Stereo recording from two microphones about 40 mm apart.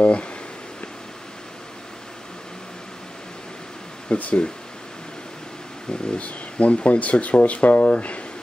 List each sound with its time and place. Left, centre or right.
0.0 s speech: left
4.1 s speech: left
6.0 s speech: left